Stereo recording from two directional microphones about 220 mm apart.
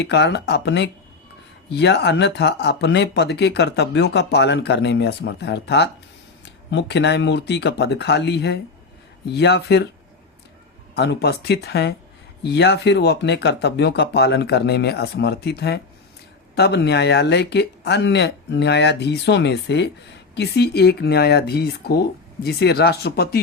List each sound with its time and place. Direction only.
0.0 s speech: 50° left (ahead or behind)
10.9 s speech: 50° left (ahead or behind)